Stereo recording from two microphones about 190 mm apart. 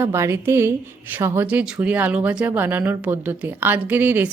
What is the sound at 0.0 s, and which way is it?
Speech, 15° right (ahead or behind).